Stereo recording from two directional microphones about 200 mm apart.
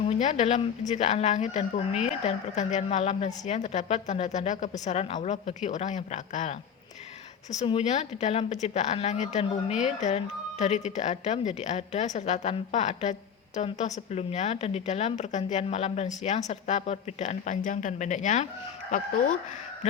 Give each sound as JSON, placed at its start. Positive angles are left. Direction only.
{"t": 0.0, "sound": "speech", "side_deg": 35}
{"t": 7.6, "sound": "speech", "side_deg": 30}